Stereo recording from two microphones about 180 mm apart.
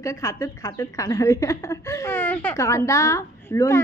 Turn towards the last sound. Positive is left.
turn(degrees=15)  # may be behind; listen again after turning